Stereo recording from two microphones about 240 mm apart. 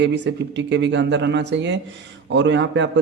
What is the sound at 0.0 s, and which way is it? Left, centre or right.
A man's voice, right.